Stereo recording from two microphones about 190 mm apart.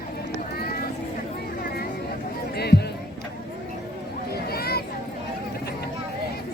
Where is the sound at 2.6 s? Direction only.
60° left (ahead or behind).